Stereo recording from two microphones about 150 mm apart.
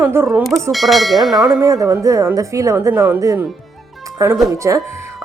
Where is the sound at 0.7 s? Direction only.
Centre (ahead or behind).